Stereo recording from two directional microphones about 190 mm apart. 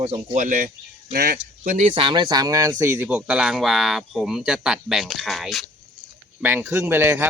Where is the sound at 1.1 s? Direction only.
55° right (ahead or behind); by 7.2 s 10° right (ahead or behind).